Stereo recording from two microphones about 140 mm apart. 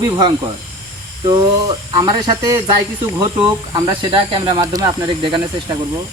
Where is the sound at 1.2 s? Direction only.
30° right (ahead or behind).